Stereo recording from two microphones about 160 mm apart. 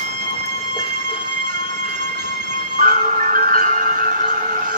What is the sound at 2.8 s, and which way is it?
Marimba, 55° right (ahead or behind).